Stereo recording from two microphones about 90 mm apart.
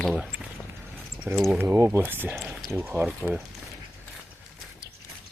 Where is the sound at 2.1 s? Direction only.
20° right (ahead or behind).